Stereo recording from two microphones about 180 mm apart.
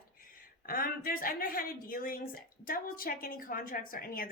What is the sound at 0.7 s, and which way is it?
A woman's voice, 55° left (ahead or behind).